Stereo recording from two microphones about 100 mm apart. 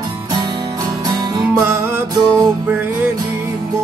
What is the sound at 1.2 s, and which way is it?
Music, 45° right (ahead or behind).